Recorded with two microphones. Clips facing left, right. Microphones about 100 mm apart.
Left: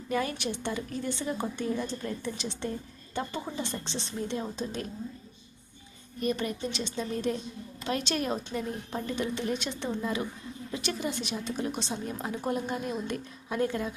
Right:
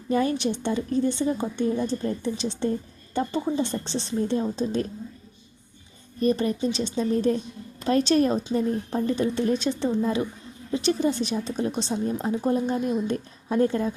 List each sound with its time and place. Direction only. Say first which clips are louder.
0.1 s a woman's voice: right 7 dB; 30° right (ahead or behind)
6.1 s a woman's voice: right 7 dB; 35° right (ahead or behind)